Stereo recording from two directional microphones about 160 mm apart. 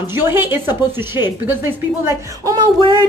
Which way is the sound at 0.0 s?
15° right (ahead or behind).